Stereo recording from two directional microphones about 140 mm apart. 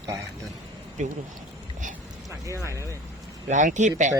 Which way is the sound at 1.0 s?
60° right (ahead or behind).